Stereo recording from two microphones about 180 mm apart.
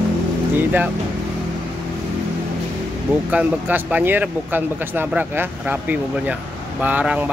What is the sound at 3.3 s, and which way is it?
Speech, 10° right (ahead or behind).